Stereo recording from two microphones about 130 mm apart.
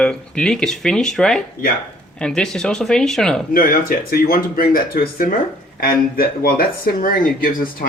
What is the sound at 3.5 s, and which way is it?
Speech, 90° left.